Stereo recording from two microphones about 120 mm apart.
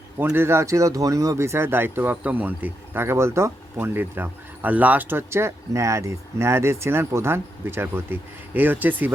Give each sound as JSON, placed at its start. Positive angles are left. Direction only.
{"t": 0.2, "sound": "speech", "side_deg": -15}